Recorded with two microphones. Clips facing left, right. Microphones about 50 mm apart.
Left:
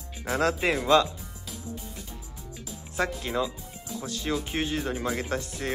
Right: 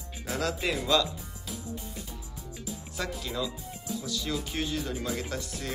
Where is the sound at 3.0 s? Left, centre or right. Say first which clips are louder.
Left 6 dB; left.